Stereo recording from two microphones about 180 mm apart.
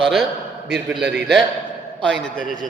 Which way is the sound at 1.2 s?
65° right (ahead or behind).